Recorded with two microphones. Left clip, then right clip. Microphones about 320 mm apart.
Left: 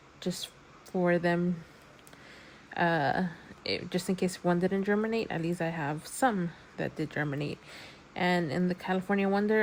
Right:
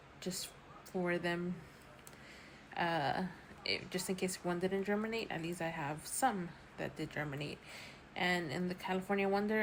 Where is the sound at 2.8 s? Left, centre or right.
Left.